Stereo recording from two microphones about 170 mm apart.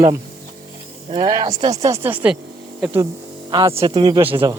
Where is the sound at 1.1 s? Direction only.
30° right (ahead or behind); by 2.4 s 10° right (ahead or behind).